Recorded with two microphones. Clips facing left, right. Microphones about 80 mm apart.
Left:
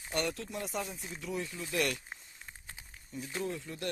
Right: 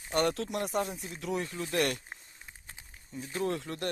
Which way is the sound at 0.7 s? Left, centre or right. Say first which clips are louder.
Right 6 dB; right.